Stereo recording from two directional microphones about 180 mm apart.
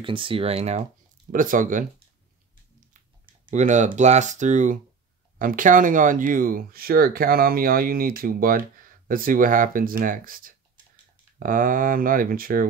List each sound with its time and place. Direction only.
0.0 s speech: 30° right (ahead or behind)
1.3 s speech: 50° right (ahead or behind)
3.4 s speech: 45° right (ahead or behind)